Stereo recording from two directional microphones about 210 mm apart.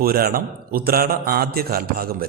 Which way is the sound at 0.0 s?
45° right (ahead or behind).